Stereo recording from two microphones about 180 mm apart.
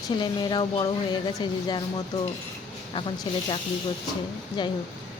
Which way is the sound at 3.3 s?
25° left (ahead or behind).